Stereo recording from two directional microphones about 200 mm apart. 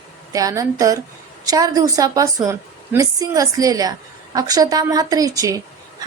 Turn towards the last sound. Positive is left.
turn(degrees=-15)  # may be behind; listen again after turning